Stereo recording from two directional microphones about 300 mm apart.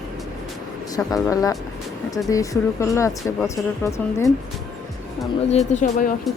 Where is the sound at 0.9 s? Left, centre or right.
Centre.